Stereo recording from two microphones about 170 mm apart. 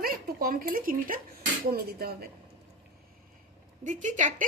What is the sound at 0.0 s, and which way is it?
A woman's voice, 60° right (ahead or behind).